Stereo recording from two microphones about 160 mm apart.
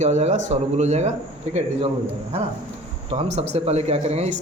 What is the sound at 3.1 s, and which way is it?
Speech, 40° right (ahead or behind).